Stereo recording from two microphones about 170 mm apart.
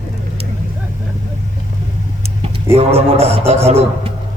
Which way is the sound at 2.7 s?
35° right (ahead or behind).